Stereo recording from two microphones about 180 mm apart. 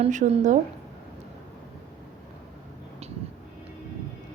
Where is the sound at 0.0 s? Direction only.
40° right (ahead or behind).